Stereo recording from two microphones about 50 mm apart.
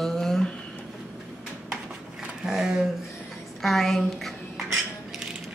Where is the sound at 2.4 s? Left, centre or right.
Centre.